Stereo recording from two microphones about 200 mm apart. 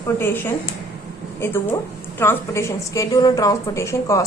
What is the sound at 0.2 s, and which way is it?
Speech, 10° left (ahead or behind).